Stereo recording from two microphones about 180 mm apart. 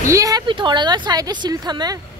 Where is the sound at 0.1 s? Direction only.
20° right (ahead or behind).